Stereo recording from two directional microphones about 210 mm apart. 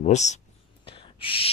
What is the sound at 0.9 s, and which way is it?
Owl, 25° left (ahead or behind).